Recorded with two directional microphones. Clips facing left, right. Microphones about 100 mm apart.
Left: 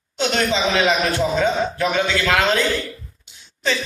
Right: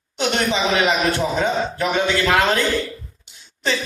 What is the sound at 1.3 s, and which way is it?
A man's voice, 20° right (ahead or behind).